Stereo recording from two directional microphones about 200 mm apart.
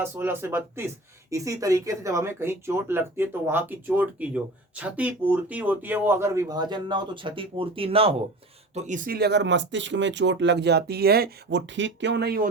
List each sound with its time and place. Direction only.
0.0 s speech: 10° right (ahead or behind); by 12.5 s 50° right (ahead or behind)